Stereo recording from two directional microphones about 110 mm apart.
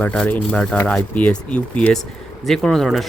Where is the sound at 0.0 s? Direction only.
15° left (ahead or behind).